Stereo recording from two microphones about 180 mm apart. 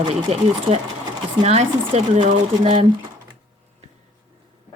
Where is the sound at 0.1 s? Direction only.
35° right (ahead or behind).